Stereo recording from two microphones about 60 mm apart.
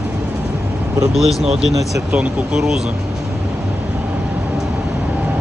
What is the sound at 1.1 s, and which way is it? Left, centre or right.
Speech, centre.